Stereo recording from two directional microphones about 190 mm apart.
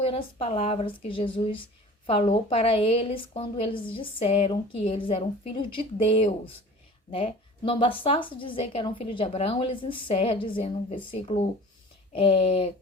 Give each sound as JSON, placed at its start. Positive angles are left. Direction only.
{"t": 0.0, "sound": "a woman's voice", "side_deg": 30}